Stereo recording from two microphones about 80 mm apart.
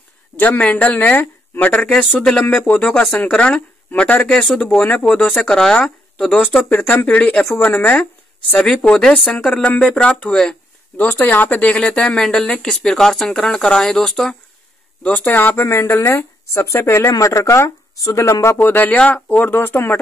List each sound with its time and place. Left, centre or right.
0.4 s speech: centre
8.5 s speech: centre
11.0 s speech: left; by 14.3 s centre
15.0 s speech: centre; by 18.6 s left
18.6 s speech: left